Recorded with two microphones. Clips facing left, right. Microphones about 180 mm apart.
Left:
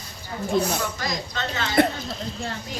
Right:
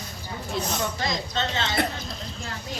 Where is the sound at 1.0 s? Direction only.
25° right (ahead or behind).